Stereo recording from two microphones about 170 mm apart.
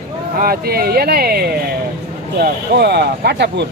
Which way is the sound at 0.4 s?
60° right (ahead or behind).